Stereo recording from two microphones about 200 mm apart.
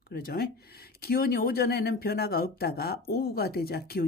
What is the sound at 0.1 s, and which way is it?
Speech, 50° left (ahead or behind).